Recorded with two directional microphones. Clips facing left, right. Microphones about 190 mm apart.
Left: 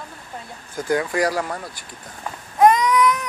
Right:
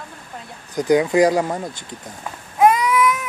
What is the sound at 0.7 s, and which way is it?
Speech, 20° right (ahead or behind).